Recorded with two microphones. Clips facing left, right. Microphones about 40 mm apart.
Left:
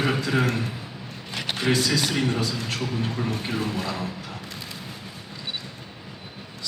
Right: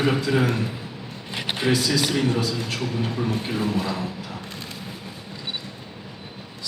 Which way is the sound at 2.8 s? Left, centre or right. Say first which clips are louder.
Right 2 dB; centre.